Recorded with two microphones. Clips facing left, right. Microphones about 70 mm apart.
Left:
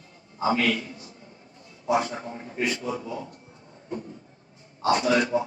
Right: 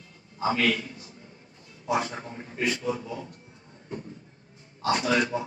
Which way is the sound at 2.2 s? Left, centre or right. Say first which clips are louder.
Left 1 dB; left.